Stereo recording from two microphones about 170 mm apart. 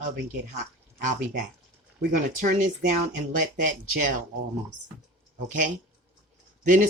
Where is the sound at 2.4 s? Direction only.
50° right (ahead or behind).